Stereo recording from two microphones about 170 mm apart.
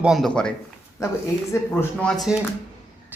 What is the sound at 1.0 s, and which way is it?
Speech, 15° left (ahead or behind).